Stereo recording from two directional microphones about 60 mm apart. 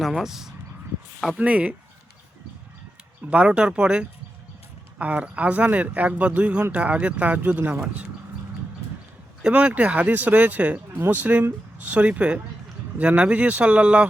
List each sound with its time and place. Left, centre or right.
0.2 s speech: centre
1.4 s speech: right
3.2 s speech: right
9.4 s speech: right